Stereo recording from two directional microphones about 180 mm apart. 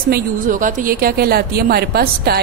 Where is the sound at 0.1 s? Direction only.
50° right (ahead or behind).